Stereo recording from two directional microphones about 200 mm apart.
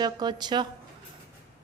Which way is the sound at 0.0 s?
20° right (ahead or behind).